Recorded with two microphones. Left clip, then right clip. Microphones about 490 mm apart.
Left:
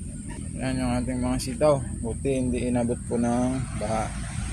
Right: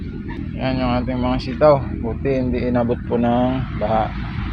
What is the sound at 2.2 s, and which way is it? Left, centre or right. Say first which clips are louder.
Speech: right 6 dB; left.